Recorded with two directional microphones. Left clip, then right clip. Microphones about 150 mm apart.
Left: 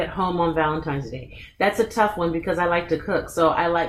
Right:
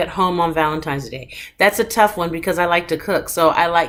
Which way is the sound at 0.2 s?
20° right (ahead or behind).